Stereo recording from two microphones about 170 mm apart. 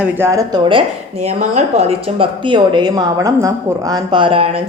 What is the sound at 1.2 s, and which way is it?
Speech, 40° right (ahead or behind).